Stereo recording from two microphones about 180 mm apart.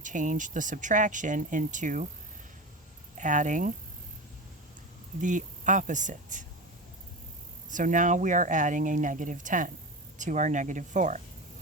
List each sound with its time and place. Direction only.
0.0 s speech: 45° right (ahead or behind)
3.2 s speech: 45° right (ahead or behind)
5.2 s speech: 45° right (ahead or behind)
7.7 s speech: 45° right (ahead or behind)